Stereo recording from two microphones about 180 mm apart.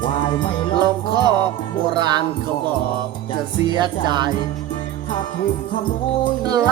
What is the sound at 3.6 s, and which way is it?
Music, 25° right (ahead or behind).